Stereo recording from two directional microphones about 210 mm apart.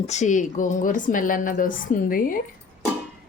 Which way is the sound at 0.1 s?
35° left (ahead or behind).